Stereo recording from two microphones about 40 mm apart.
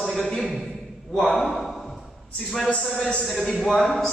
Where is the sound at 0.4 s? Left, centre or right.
Centre.